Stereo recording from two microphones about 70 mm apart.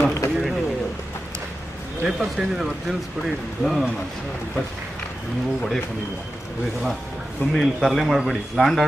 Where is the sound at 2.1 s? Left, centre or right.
Centre.